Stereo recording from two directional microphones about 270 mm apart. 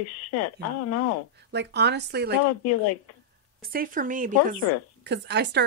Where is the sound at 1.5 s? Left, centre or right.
Right.